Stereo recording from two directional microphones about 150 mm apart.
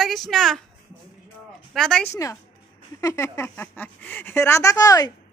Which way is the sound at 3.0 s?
20° left (ahead or behind).